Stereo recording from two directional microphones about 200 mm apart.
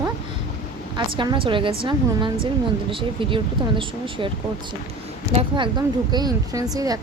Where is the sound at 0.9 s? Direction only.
20° right (ahead or behind).